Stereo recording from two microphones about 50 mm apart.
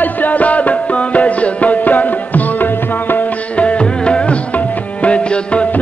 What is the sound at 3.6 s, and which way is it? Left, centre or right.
Music, left.